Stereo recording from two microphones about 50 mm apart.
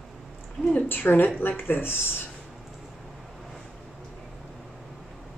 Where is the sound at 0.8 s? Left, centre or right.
Left.